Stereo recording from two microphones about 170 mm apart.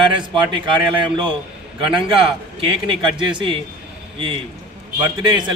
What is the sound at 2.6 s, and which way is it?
Speech, 30° right (ahead or behind).